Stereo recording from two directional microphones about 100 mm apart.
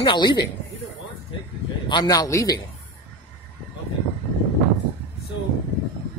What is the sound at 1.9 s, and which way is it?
Speech, 45° left (ahead or behind).